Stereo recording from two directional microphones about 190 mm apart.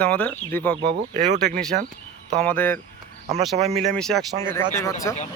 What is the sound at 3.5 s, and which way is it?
Speech, 35° right (ahead or behind).